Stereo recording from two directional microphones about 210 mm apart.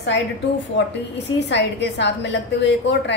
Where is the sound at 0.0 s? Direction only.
55° left (ahead or behind).